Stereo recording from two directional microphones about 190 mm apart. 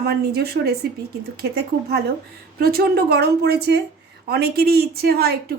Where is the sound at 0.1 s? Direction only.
55° right (ahead or behind).